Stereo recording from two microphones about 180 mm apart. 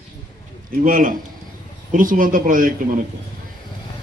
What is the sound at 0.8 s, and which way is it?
A man's voice, 50° right (ahead or behind).